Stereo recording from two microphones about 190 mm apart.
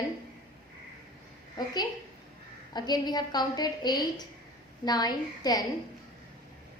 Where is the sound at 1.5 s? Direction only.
20° left (ahead or behind).